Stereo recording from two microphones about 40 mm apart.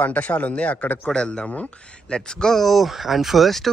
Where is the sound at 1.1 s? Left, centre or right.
Left.